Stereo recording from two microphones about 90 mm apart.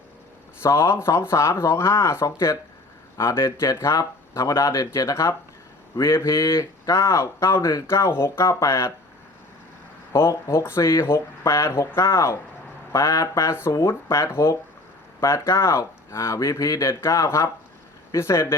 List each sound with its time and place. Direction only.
0.6 s speech: 30° left (ahead or behind)
10.1 s speech: 30° left (ahead or behind)